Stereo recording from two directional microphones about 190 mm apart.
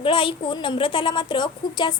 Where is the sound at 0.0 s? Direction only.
25° left (ahead or behind).